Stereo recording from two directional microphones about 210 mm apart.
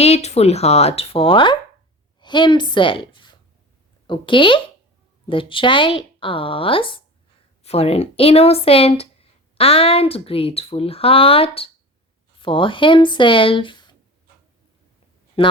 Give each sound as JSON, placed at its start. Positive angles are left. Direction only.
{"t": 0.0, "sound": "a woman's voice", "side_deg": 30}
{"t": 15.4, "sound": "speech", "side_deg": 25}